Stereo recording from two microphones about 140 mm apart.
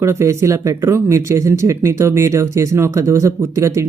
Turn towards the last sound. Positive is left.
turn(degrees=-20)  # may be behind; listen again after turning